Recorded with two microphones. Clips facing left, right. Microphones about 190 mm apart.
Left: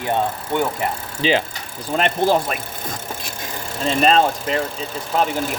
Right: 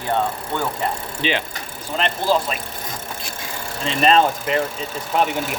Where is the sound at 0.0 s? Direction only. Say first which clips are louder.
Left 1 dB; 20° left (ahead or behind).